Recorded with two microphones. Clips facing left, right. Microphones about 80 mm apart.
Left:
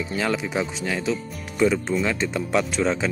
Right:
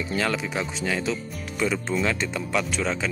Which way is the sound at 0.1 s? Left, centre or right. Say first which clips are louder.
Left 1 dB; centre.